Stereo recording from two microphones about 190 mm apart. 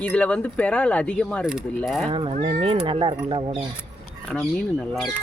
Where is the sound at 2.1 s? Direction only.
30° right (ahead or behind).